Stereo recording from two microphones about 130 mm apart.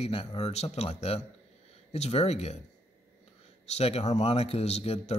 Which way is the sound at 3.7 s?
55° left (ahead or behind).